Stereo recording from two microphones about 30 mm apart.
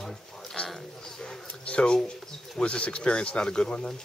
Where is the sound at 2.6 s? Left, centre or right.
Left.